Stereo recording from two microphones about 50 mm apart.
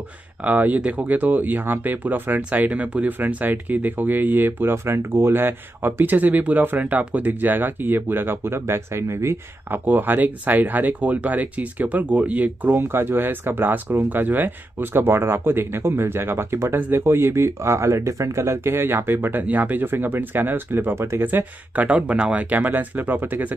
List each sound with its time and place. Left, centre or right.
0.4 s speech: right
9.7 s speech: right
12.7 s speech: right
16.7 s speech: right
20.9 s speech: right
21.2 s speech: right
21.8 s speech: right